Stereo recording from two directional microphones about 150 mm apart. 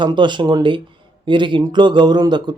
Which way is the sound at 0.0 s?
30° right (ahead or behind).